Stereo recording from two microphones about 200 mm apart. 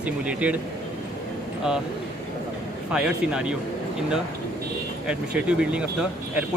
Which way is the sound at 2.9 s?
5° right (ahead or behind).